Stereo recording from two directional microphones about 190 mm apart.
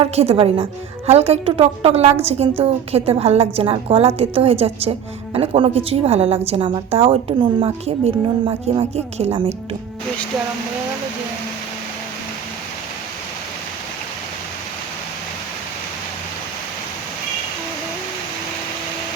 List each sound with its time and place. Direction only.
0.0 s a woman's voice: 30° right (ahead or behind)